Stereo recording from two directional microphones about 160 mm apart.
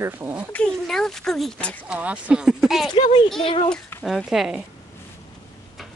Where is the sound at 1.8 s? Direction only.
5° right (ahead or behind).